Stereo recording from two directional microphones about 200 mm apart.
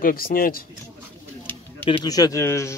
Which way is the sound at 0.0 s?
45° left (ahead or behind).